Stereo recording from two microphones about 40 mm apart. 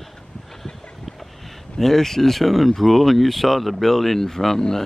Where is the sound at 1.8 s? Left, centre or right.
Centre.